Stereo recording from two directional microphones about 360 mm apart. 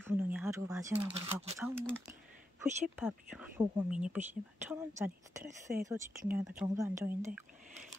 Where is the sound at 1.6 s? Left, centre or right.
Centre.